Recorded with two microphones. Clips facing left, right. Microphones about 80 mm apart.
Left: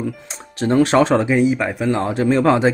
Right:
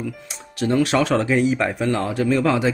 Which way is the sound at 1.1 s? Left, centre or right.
Centre.